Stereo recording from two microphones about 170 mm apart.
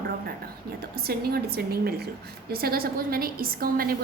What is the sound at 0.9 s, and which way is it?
Speech, 65° right (ahead or behind).